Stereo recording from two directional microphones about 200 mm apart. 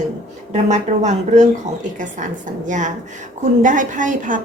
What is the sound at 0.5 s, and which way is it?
Speech, 35° right (ahead or behind).